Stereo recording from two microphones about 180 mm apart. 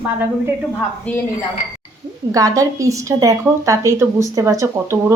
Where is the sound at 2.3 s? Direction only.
20° right (ahead or behind).